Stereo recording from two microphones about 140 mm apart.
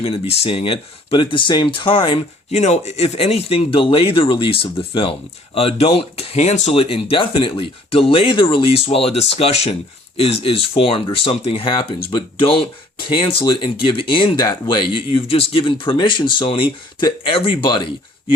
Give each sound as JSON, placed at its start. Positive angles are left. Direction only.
{"t": 0.0, "sound": "speech", "side_deg": 40}